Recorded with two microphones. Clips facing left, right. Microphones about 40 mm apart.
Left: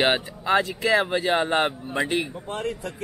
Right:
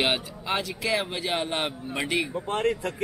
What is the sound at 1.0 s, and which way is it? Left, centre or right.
Speech, centre.